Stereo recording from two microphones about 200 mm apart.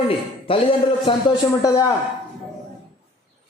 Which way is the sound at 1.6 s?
15° left (ahead or behind).